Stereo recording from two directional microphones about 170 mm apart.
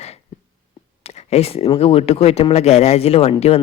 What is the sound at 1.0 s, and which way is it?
Speech, 40° left (ahead or behind).